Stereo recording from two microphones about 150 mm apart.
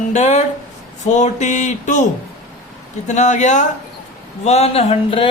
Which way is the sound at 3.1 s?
50° left (ahead or behind).